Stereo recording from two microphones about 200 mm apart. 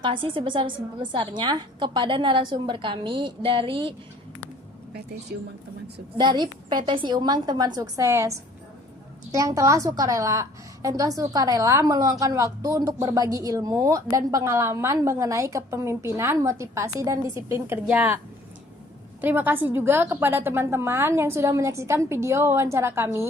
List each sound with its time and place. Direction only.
0.0 s a woman's voice: 25° right (ahead or behind)
5.3 s speech: 50° right (ahead or behind)
6.1 s a woman's voice: 20° right (ahead or behind)
19.2 s a woman's voice: 10° right (ahead or behind)